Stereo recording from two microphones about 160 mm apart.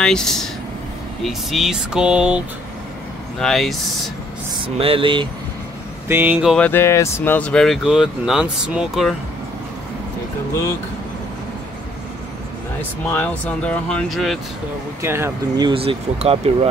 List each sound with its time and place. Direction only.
0.0 s speech: 5° left (ahead or behind)
4.6 s mantra: 35° right (ahead or behind)
6.0 s speech: 15° right (ahead or behind)
6.5 s speech: 10° left (ahead or behind)
13.1 s speech: 10° left (ahead or behind)
15.0 s speech: 15° right (ahead or behind); by 16.5 s 40° right (ahead or behind)